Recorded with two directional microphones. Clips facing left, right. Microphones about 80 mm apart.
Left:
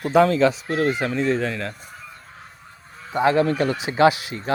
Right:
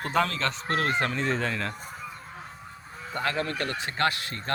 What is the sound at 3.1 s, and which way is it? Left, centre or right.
Speech, centre.